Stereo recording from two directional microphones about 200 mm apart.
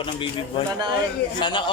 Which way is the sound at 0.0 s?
25° left (ahead or behind).